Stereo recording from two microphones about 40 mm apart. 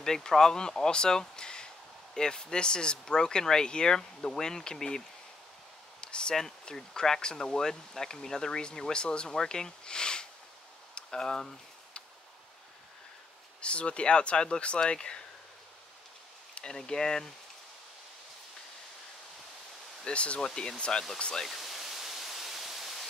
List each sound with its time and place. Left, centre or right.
0.0 s speech: centre
5.9 s a sound: left
6.3 s speech: centre
9.3 s speech: centre
11.0 s a sound: centre
13.6 s speech: left
16.7 s speech: centre
20.1 s speech: left
20.3 s speech: centre
21.5 s pink noise: centre